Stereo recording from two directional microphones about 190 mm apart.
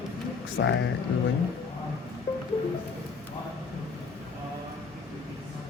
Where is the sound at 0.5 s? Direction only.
70° left (ahead or behind).